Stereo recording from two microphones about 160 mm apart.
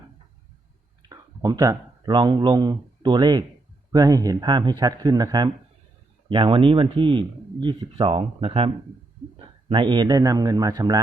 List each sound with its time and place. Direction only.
1.1 s a man's voice: 20° right (ahead or behind)